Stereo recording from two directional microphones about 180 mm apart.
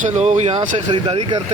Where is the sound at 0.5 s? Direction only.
25° right (ahead or behind).